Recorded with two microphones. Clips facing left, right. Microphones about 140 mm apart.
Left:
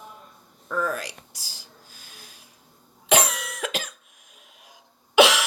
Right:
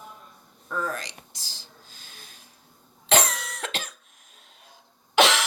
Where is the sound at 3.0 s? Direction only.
10° left (ahead or behind).